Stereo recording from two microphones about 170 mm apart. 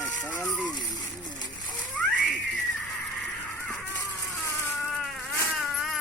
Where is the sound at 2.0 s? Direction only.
10° left (ahead or behind).